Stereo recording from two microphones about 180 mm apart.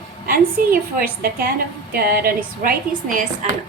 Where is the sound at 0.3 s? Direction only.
55° right (ahead or behind).